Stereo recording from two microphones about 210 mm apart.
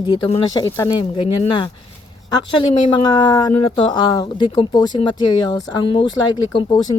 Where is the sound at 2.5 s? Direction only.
20° left (ahead or behind).